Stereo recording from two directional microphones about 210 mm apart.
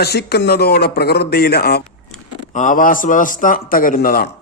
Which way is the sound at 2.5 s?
35° left (ahead or behind).